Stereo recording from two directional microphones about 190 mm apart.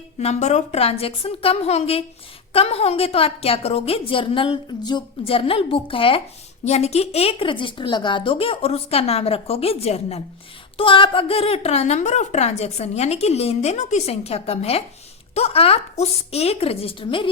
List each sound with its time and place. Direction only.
0.2 s a woman's voice: 35° left (ahead or behind)